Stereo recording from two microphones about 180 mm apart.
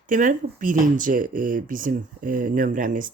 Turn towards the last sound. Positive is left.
turn(degrees=-45)  # may be behind; listen again after turning